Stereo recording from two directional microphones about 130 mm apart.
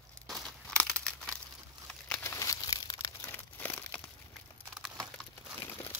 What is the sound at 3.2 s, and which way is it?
Crumpling, 15° left (ahead or behind).